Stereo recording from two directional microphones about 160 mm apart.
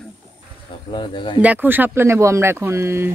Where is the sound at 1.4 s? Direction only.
10° right (ahead or behind).